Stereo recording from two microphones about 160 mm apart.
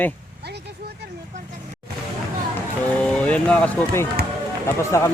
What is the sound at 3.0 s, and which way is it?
Speech, 5° left (ahead or behind).